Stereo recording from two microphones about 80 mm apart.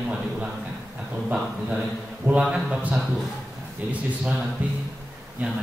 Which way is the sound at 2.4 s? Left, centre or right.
Centre.